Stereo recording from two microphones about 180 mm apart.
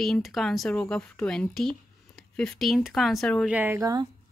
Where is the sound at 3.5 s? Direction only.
10° right (ahead or behind).